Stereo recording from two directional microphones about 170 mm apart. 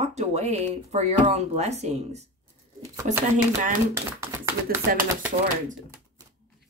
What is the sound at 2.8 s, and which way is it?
Speech, 15° right (ahead or behind).